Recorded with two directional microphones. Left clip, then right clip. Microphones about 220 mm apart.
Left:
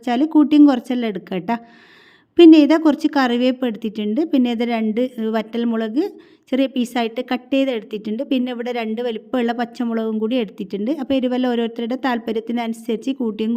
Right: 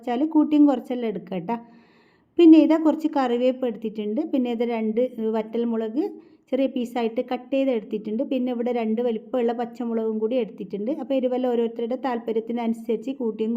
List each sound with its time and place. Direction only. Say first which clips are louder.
0.0 s a woman's voice: left 5 dB; 35° left (ahead or behind)